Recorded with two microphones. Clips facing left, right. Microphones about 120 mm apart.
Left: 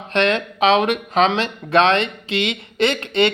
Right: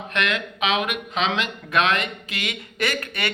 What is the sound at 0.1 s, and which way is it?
Speech, 30° left (ahead or behind).